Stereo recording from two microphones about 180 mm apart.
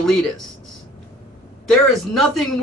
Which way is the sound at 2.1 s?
Centre (ahead or behind).